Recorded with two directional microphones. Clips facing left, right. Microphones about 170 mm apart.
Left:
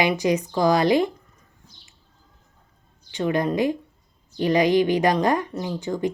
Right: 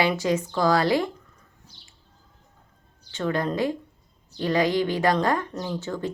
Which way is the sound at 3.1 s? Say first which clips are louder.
Left 3 dB; 15° left (ahead or behind).